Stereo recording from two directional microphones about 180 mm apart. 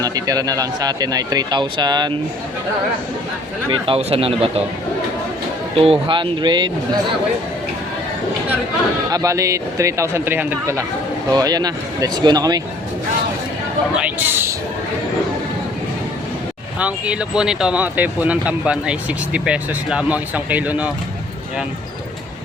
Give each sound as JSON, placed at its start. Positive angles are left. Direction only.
{"t": 0.0, "sound": "speech", "side_deg": -20}
{"t": 3.7, "sound": "speech", "side_deg": -30}
{"t": 5.7, "sound": "speech", "side_deg": -30}
{"t": 9.0, "sound": "speech", "side_deg": -20}
{"t": 14.0, "sound": "speech", "side_deg": -10}
{"t": 16.8, "sound": "speech", "side_deg": -5}